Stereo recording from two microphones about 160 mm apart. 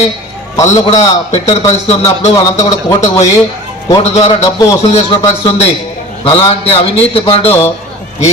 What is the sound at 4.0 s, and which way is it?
Speech, 40° left (ahead or behind).